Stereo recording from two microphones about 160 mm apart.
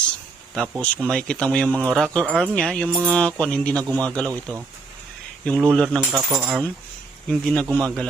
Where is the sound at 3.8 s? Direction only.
20° right (ahead or behind).